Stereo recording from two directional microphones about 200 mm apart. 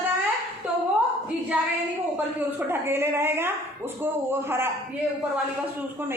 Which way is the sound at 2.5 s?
10° right (ahead or behind).